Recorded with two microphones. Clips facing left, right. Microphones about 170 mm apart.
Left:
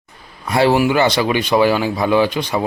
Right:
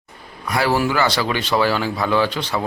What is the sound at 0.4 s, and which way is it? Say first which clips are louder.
Speech: left 5 dB; 25° left (ahead or behind).